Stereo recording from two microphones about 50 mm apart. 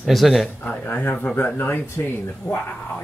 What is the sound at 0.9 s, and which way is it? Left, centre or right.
Speech, left.